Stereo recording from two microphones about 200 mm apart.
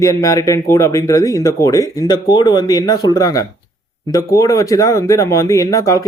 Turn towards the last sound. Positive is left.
turn(degrees=15)  # may be behind; listen again after turning